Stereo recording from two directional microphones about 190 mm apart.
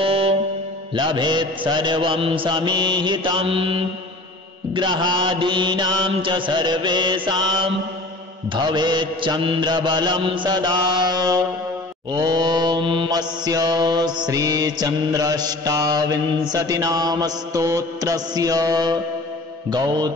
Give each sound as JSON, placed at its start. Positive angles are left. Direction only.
{"t": 0.0, "sound": "music", "side_deg": -30}
{"t": 0.9, "sound": "mantra", "side_deg": -25}